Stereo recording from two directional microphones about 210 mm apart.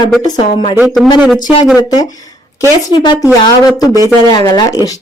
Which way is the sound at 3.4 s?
20° left (ahead or behind).